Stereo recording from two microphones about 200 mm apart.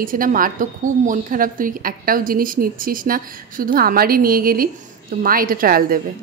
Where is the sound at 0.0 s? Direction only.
45° right (ahead or behind).